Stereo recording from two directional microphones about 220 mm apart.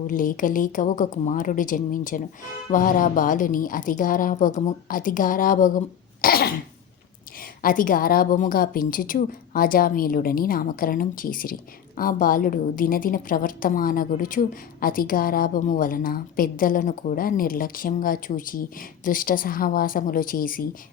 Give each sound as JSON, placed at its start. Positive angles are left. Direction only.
{"t": 0.1, "sound": "a woman's voice", "side_deg": 40}
{"t": 6.2, "sound": "cough", "side_deg": 45}
{"t": 7.6, "sound": "a woman's voice", "side_deg": 40}